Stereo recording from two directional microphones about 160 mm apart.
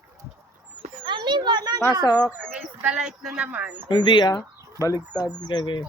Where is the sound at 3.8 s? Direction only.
30° left (ahead or behind).